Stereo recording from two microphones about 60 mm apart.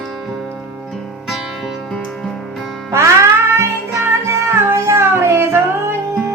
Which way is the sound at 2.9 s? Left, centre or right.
Right.